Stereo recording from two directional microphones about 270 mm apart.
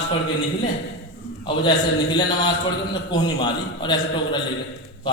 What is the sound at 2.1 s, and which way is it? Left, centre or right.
A man's voice, centre.